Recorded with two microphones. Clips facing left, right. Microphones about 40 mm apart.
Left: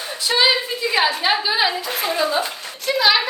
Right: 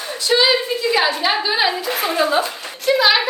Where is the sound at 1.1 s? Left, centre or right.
Centre.